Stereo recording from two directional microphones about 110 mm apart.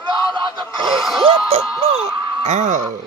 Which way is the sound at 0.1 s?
45° right (ahead or behind).